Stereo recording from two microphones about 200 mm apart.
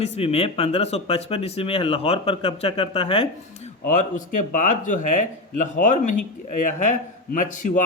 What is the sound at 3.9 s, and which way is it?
Speech, 40° left (ahead or behind).